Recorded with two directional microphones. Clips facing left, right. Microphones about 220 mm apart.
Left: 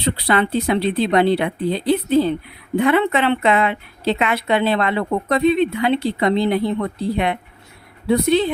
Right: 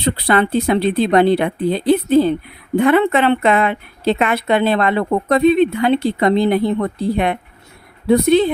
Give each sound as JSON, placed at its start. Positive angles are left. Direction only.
{"t": 0.0, "sound": "a woman's voice", "side_deg": -45}